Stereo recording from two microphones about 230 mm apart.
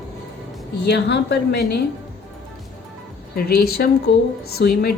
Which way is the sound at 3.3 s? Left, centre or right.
Left.